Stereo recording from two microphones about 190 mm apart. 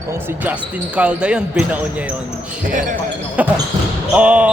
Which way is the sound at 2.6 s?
45° right (ahead or behind).